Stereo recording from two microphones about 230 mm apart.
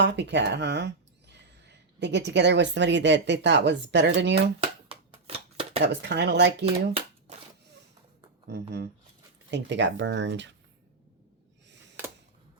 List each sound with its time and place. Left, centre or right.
0.0 s speech: right
4.6 s shuffling cards: right
5.8 s speech: right
7.3 s a sound: right
8.4 s speech: right